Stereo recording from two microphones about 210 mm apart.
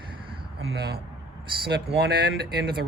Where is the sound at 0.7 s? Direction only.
50° right (ahead or behind).